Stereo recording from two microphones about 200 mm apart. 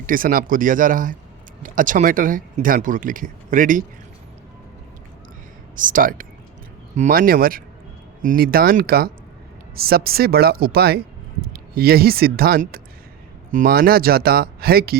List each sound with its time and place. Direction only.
0.0 s speech: 45° right (ahead or behind)
5.7 s speech: 40° right (ahead or behind)